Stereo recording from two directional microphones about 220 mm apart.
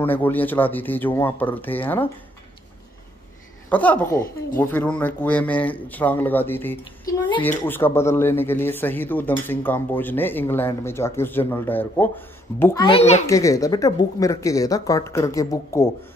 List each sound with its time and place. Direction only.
0.0 s speech: 10° left (ahead or behind)
3.7 s speech: 5° left (ahead or behind)
6.8 s a sound: 20° left (ahead or behind)
7.4 s speech: 10° left (ahead or behind)
12.8 s a child's voice: 25° left (ahead or behind)
13.3 s speech: 15° left (ahead or behind)